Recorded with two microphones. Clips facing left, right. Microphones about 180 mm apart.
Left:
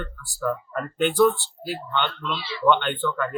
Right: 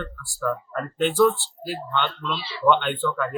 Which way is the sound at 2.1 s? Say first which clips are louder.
Even; 35° right (ahead or behind).